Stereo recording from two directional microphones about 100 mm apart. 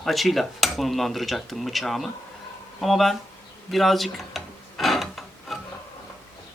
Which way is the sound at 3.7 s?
Centre (ahead or behind).